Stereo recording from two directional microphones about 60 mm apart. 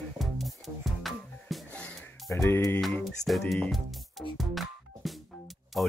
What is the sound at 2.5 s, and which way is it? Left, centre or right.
Speech, left.